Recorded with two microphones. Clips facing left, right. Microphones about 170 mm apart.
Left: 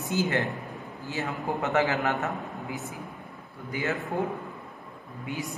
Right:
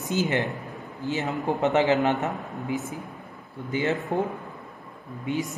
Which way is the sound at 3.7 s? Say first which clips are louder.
Right 5 dB; 25° right (ahead or behind).